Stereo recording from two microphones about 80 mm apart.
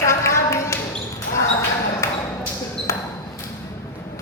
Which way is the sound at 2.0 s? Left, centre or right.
Left.